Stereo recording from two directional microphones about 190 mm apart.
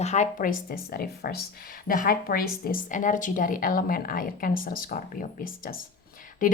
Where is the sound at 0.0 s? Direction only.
40° left (ahead or behind).